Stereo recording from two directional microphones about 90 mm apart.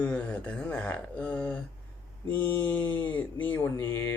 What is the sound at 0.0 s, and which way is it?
Speech, 15° left (ahead or behind).